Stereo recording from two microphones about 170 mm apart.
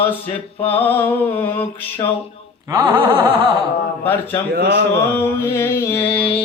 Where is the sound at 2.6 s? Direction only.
25° right (ahead or behind).